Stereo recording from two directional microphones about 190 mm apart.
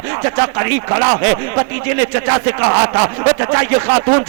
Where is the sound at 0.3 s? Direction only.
15° right (ahead or behind).